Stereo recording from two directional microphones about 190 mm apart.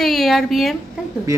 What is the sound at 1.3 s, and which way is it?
Speech, 15° right (ahead or behind).